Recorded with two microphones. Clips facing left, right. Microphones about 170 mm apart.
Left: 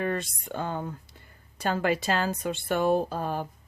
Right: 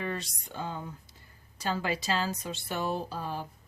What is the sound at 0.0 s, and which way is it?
Speech, 55° left (ahead or behind).